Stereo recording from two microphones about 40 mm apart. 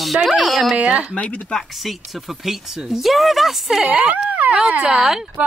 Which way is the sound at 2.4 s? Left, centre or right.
Centre.